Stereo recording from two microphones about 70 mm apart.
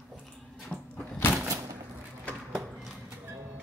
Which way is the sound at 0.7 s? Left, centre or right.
Left.